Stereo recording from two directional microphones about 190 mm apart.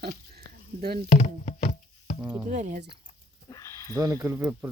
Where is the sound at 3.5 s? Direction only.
15° left (ahead or behind).